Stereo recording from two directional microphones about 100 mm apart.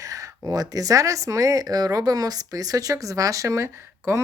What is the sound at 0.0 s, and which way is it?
Speech, 35° right (ahead or behind).